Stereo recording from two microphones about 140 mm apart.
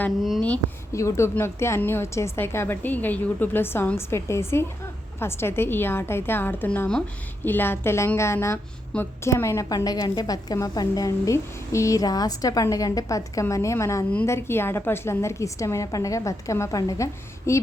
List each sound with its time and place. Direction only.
0.2 s a woman's voice: centre (ahead or behind)
0.9 s a woman's voice: 20° left (ahead or behind)